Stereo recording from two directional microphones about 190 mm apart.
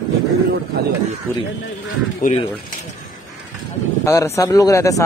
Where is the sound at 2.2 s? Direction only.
45° left (ahead or behind).